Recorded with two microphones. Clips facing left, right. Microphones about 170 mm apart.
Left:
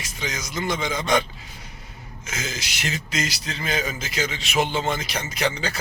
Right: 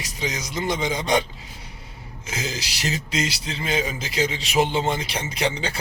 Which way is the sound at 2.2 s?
35° right (ahead or behind).